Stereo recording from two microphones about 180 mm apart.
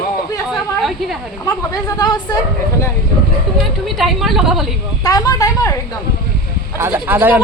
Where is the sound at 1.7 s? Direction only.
25° left (ahead or behind).